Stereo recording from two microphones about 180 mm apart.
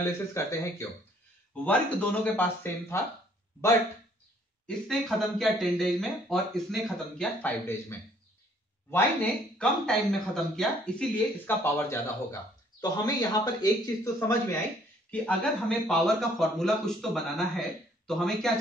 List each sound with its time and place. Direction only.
0.3 s speech: 15° left (ahead or behind)
4.6 s speech: centre (ahead or behind)
8.9 s a man's voice: 5° left (ahead or behind)